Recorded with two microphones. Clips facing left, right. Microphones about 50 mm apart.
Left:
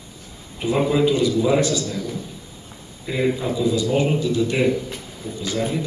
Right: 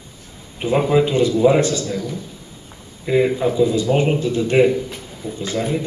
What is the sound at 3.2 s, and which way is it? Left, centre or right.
A man's voice, centre.